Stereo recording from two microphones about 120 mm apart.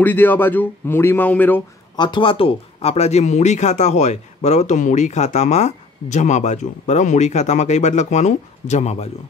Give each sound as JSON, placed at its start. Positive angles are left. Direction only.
{"t": 0.0, "sound": "speech", "side_deg": 15}
{"t": 2.0, "sound": "speech", "side_deg": 40}